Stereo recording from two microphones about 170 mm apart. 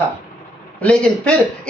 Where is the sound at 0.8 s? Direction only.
5° left (ahead or behind).